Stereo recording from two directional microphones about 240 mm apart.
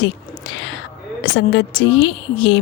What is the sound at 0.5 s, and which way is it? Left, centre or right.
Speech, left.